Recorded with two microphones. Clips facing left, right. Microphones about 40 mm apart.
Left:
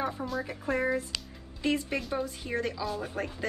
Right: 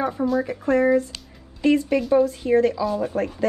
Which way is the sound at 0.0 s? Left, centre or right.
Centre.